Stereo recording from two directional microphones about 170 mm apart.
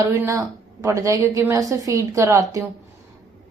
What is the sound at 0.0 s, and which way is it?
A woman's voice, 20° right (ahead or behind).